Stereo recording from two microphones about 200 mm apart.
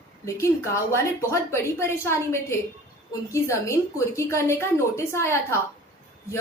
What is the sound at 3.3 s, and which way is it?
A woman's voice, 15° left (ahead or behind).